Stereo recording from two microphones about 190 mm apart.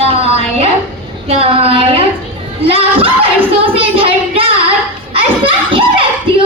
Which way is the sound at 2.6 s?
30° right (ahead or behind).